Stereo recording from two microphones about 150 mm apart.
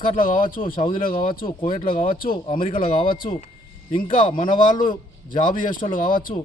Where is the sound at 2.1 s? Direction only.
70° left (ahead or behind).